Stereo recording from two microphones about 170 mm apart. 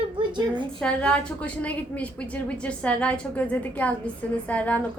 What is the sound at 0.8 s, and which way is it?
A woman's voice, 5° left (ahead or behind).